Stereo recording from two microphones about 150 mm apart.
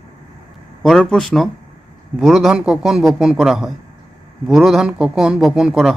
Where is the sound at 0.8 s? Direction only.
Centre (ahead or behind).